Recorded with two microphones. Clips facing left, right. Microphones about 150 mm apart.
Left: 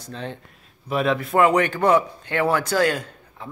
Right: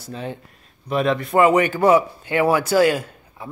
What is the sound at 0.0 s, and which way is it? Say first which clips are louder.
Speech: right 2 dB; 5° right (ahead or behind).